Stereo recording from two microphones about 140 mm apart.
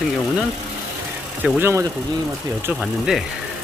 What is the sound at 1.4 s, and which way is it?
Speech, 15° right (ahead or behind).